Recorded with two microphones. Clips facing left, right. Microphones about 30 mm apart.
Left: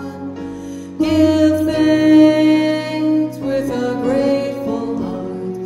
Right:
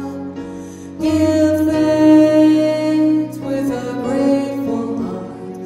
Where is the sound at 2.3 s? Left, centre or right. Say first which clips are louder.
Right 2 dB; left.